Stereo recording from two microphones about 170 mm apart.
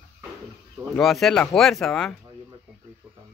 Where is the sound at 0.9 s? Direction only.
Centre (ahead or behind).